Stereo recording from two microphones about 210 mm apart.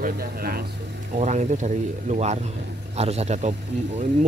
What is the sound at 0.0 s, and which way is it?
Speech, 45° right (ahead or behind).